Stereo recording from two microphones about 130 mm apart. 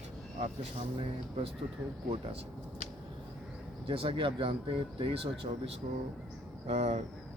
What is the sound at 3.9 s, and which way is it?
Speech, 45° right (ahead or behind).